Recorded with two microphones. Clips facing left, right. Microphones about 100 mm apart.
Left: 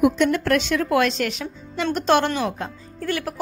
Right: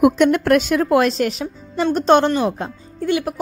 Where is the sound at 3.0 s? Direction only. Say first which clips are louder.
Right 6 dB; 15° right (ahead or behind).